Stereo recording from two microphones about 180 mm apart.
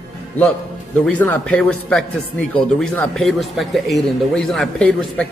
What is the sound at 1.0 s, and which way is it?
A man's voice, 10° left (ahead or behind).